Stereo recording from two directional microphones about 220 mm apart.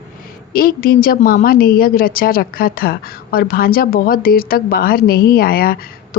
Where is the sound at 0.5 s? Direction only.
40° left (ahead or behind).